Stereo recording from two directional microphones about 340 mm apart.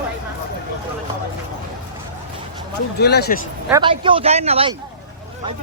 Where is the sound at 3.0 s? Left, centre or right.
Left.